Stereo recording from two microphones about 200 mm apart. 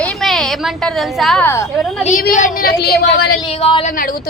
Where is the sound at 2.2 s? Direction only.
45° left (ahead or behind).